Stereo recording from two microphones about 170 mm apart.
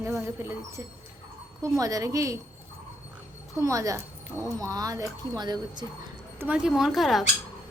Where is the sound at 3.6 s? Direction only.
20° right (ahead or behind).